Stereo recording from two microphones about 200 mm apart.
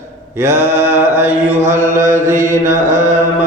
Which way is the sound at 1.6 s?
40° right (ahead or behind).